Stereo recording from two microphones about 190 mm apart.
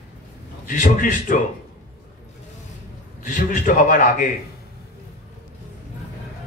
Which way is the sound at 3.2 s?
45° left (ahead or behind).